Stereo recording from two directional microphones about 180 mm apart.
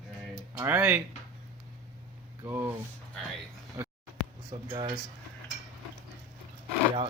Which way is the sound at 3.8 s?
15° right (ahead or behind).